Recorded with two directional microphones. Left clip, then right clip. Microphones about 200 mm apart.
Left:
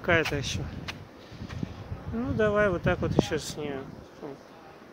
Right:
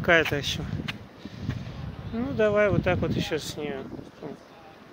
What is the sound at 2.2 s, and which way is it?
Speech, 15° right (ahead or behind).